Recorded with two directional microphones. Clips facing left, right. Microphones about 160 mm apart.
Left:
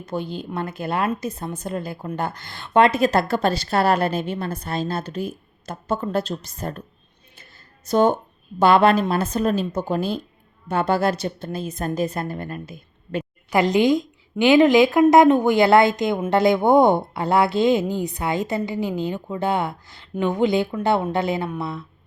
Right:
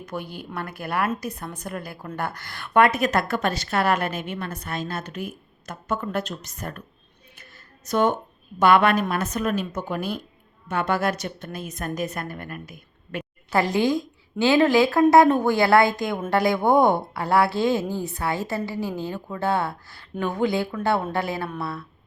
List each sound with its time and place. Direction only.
0.0 s a woman's voice: 25° left (ahead or behind)
7.3 s a sound: 30° left (ahead or behind)
8.5 s a woman's voice: 30° left (ahead or behind)